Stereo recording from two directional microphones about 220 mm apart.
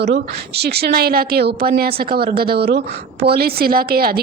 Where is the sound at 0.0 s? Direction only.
50° right (ahead or behind).